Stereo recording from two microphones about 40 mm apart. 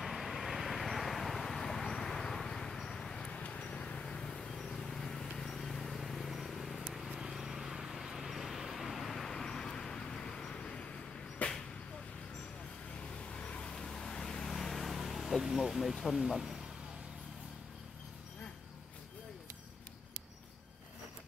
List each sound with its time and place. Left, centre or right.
0.0 s vehicle: centre
3.4 s a sound: left; by 6.8 s centre
6.9 s vehicle: centre
9.3 s vehicle: centre
11.4 s a sound: left
13.0 s vehicle: left
14.7 s vehicle: centre
16.3 s speech: centre